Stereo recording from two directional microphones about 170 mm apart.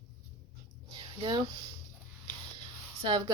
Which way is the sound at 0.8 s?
25° right (ahead or behind).